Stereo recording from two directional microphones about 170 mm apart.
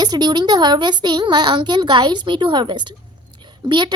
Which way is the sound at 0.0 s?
25° right (ahead or behind).